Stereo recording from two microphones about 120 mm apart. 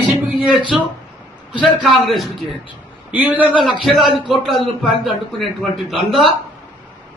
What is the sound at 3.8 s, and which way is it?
Speech, centre (ahead or behind).